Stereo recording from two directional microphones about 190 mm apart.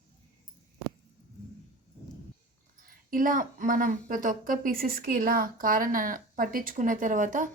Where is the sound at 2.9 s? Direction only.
45° right (ahead or behind).